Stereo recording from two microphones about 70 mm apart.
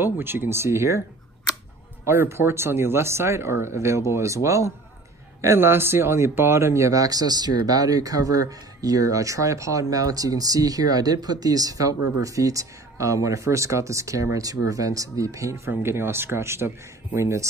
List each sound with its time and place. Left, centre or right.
0.0 s speech: right
2.0 s speech: right
15.8 s speech: right